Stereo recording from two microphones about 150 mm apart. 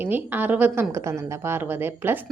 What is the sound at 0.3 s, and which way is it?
A woman's voice, 10° right (ahead or behind).